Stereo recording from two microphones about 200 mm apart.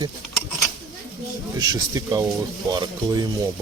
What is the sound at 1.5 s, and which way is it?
Speech, 15° right (ahead or behind).